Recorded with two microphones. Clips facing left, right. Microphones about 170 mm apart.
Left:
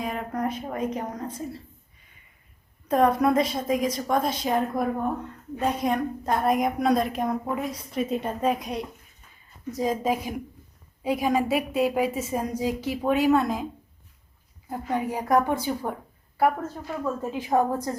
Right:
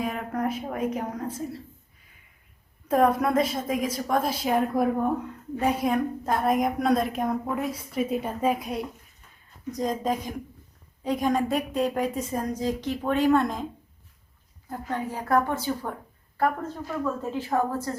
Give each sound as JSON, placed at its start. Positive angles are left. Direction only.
{"t": 0.0, "sound": "a woman's voice", "side_deg": 0}
{"t": 2.9, "sound": "a woman's voice", "side_deg": 0}
{"t": 14.7, "sound": "a woman's voice", "side_deg": 10}